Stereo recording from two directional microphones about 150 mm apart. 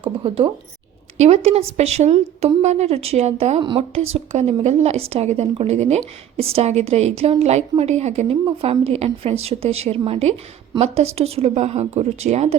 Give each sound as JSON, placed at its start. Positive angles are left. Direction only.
{"t": 0.0, "sound": "a woman's voice", "side_deg": -40}
{"t": 1.2, "sound": "speech", "side_deg": -50}
{"t": 3.6, "sound": "a woman's voice", "side_deg": -30}
{"t": 3.9, "sound": "a woman's voice", "side_deg": -45}